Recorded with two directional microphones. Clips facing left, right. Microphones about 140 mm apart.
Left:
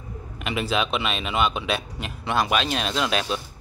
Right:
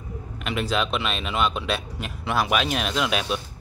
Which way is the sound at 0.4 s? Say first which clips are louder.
Even; centre (ahead or behind).